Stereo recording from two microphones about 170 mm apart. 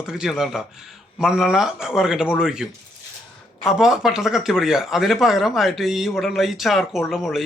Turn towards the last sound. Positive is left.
turn(degrees=0)  # may be behind; listen again after turning